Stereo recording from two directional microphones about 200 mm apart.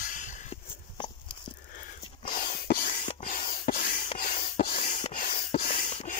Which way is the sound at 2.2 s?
45° left (ahead or behind).